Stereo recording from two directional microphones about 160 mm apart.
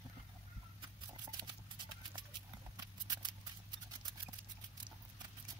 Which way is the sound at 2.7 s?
25° right (ahead or behind).